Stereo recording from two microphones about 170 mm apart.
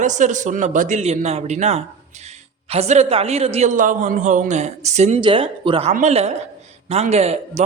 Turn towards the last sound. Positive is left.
turn(degrees=-40)  # may be behind; listen again after turning